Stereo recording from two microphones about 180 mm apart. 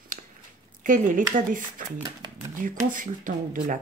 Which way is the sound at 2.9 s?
50° right (ahead or behind).